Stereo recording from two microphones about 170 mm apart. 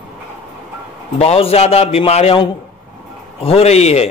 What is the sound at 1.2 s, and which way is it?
A man's voice, 35° left (ahead or behind).